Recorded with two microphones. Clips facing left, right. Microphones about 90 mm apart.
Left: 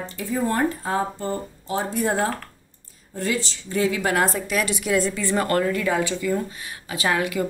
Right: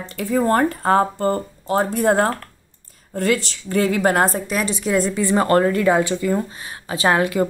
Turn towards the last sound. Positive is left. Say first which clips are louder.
# right 5 dB
turn(degrees=-35)  # may be behind; listen again after turning